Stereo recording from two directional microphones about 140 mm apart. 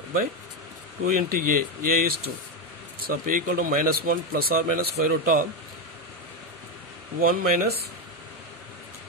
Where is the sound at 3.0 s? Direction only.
80° right.